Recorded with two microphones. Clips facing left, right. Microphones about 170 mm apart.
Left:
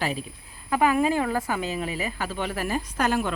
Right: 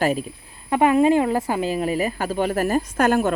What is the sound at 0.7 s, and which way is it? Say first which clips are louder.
A woman's voice: right 6 dB; 30° right (ahead or behind).